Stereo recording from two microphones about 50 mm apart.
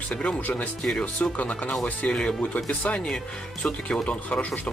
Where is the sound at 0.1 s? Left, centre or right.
Left.